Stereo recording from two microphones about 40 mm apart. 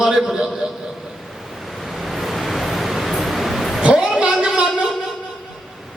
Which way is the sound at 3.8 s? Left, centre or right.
Right.